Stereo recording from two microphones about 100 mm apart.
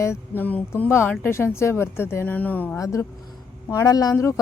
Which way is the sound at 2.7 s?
30° left (ahead or behind).